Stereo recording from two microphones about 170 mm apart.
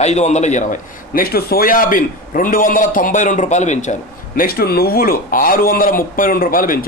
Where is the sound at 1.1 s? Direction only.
60° left (ahead or behind).